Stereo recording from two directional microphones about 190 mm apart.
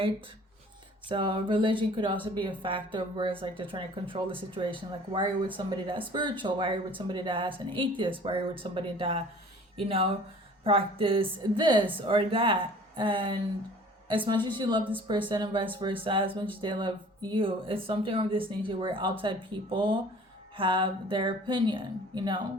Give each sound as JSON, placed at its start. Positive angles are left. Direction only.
{"t": 1.0, "sound": "speech", "side_deg": -25}